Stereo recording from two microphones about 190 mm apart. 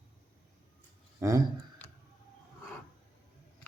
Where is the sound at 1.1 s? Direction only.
15° right (ahead or behind).